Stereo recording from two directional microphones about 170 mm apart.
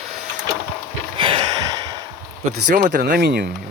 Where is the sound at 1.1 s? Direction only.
30° right (ahead or behind).